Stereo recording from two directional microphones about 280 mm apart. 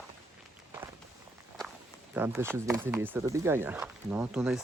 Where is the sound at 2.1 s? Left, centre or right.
Centre.